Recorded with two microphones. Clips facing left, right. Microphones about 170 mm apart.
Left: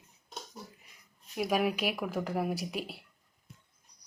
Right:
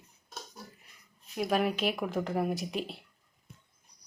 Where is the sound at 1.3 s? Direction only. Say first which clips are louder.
Right 1 dB; 10° left (ahead or behind).